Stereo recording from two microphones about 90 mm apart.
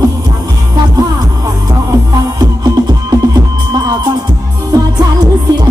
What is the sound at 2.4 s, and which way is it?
Music, 45° right (ahead or behind).